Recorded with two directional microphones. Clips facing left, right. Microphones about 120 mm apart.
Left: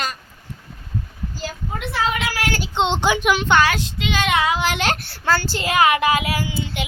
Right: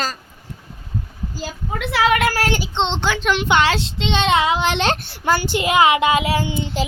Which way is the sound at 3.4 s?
20° right (ahead or behind).